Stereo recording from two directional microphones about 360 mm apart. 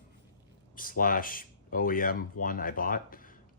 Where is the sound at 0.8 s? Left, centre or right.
Left.